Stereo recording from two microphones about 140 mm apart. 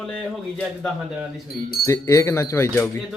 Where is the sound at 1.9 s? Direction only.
20° left (ahead or behind).